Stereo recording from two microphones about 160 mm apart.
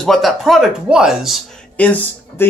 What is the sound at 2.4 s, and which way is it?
Speech, 15° left (ahead or behind).